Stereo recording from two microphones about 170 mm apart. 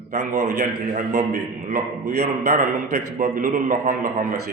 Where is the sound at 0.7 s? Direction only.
55° right (ahead or behind).